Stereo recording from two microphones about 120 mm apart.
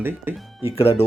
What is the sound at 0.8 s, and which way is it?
Speech, 55° left (ahead or behind).